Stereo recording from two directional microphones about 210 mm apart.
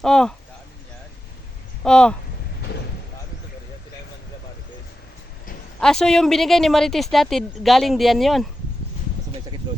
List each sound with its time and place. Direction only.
0.0 s speech: 5° left (ahead or behind)
1.8 s speech: 5° left (ahead or behind)
5.8 s speech: 5° left (ahead or behind)
9.6 s vehicle: 20° right (ahead or behind)